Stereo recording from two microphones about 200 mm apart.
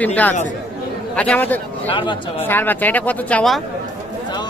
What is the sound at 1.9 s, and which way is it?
Speech, 25° left (ahead or behind).